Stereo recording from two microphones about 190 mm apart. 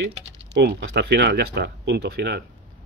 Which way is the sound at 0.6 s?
65° right (ahead or behind).